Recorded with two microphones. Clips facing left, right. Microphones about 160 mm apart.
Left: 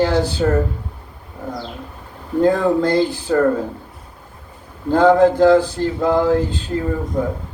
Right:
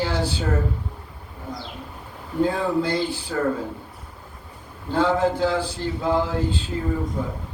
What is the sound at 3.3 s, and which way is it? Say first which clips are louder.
Speech: left 10 dB; 60° left (ahead or behind).